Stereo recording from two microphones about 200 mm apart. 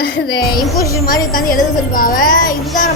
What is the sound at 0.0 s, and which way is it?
A child's voice, 50° left (ahead or behind).